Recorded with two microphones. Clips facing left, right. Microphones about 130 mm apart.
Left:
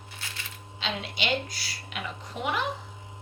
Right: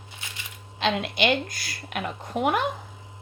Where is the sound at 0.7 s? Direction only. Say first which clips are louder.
Right 8 dB; 60° right (ahead or behind).